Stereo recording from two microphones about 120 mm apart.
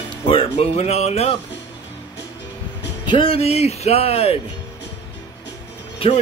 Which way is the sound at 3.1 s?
50° left (ahead or behind).